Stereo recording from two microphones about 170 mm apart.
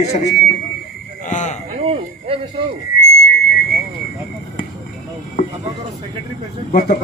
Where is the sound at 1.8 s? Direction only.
35° right (ahead or behind).